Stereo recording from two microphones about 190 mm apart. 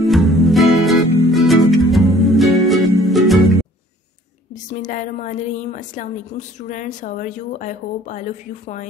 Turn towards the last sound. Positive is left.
turn(degrees=40)  # may be behind; listen again after turning